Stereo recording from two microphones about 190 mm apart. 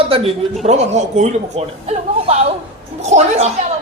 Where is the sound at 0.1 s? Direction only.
30° right (ahead or behind).